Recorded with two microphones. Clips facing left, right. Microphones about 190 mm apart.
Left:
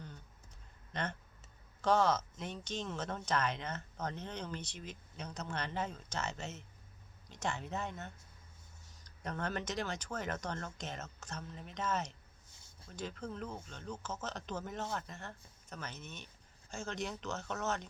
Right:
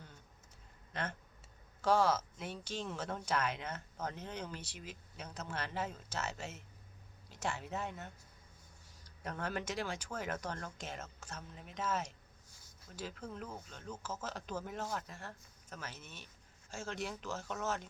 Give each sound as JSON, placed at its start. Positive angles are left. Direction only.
{"t": 1.8, "sound": "speech", "side_deg": -5}
{"t": 12.5, "sound": "a sound", "side_deg": 25}
{"t": 12.9, "sound": "speech", "side_deg": -5}